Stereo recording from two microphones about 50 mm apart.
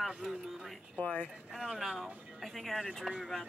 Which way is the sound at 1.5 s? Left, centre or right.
Centre.